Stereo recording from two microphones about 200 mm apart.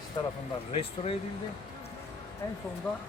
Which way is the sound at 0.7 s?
30° left (ahead or behind).